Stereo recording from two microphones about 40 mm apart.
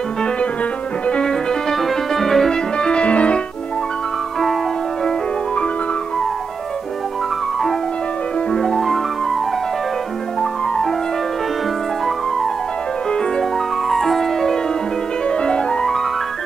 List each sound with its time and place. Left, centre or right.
1.0 s music: left
1.3 s music: centre
2.8 s piano: left
8.5 s music: centre
10.4 s music: centre
13.4 s music: centre
15.2 s music: left